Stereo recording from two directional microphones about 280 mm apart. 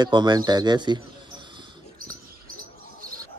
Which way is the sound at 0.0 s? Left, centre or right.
Centre.